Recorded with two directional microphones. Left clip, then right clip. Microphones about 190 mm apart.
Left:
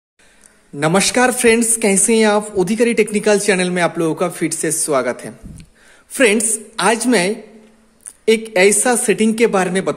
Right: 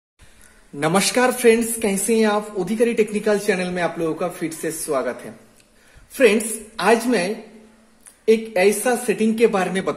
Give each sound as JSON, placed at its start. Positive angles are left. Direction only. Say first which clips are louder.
{"t": 0.7, "sound": "a man's voice", "louder": "left 4 dB", "side_deg": 25}